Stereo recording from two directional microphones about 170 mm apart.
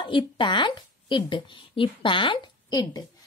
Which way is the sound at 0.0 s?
30° left (ahead or behind).